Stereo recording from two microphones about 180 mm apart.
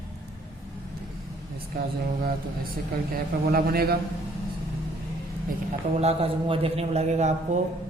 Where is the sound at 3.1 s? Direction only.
60° right (ahead or behind).